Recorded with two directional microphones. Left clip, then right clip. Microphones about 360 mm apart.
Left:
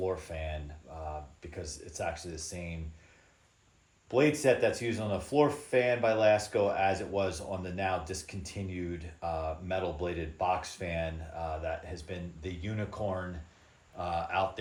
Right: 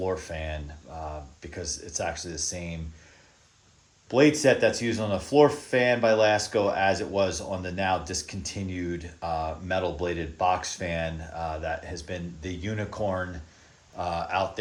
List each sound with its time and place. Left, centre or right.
0.0 s speech: right
4.1 s speech: right
14.0 s speech: centre